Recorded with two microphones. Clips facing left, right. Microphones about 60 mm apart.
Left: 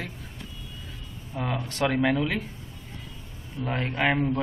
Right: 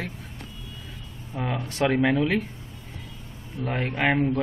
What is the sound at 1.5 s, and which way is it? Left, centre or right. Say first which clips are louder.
Speech: right 3 dB; centre.